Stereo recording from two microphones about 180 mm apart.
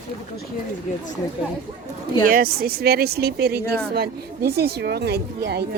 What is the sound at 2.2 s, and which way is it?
A woman's voice, 55° right (ahead or behind).